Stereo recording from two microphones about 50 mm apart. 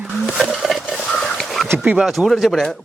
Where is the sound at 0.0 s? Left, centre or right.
Centre.